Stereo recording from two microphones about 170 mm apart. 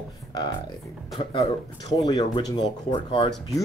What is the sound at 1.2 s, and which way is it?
Speech, 30° left (ahead or behind).